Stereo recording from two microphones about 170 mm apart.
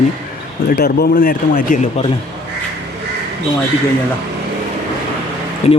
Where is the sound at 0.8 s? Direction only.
60° left (ahead or behind).